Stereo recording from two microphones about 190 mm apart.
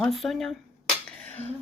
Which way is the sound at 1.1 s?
10° left (ahead or behind).